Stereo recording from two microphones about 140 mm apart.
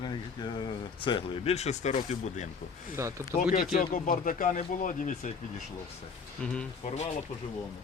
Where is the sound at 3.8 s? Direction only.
85° left; by 5.3 s 65° left (ahead or behind).